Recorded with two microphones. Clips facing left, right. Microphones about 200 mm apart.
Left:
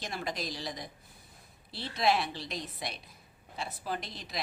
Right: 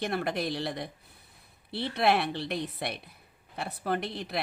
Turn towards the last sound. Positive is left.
turn(degrees=-60)  # may be behind; listen again after turning